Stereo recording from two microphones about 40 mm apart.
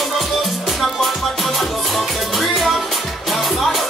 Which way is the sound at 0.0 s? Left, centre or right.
Centre.